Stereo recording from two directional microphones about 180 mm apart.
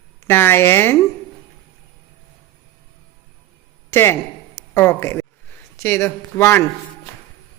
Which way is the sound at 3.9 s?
15° left (ahead or behind).